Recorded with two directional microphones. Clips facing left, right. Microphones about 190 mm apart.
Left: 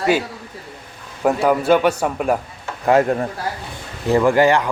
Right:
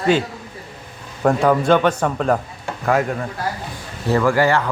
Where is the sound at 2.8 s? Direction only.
25° left (ahead or behind).